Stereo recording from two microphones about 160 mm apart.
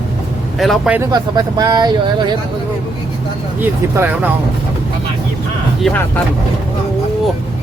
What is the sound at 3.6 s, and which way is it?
Speech, 10° right (ahead or behind).